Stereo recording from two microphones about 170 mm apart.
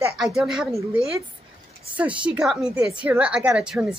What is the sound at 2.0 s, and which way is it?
A woman's voice, 5° right (ahead or behind).